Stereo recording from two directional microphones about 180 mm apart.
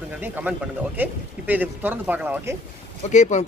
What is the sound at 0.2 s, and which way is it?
Speech, 10° right (ahead or behind).